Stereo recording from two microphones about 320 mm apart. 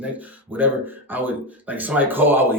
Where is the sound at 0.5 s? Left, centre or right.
Centre.